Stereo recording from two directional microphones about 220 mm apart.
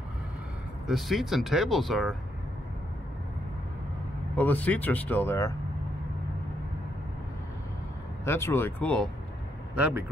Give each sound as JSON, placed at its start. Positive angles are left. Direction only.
{"t": 0.8, "sound": "speech", "side_deg": 0}
{"t": 4.4, "sound": "speech", "side_deg": 10}
{"t": 8.3, "sound": "speech", "side_deg": 10}
{"t": 9.8, "sound": "speech", "side_deg": -5}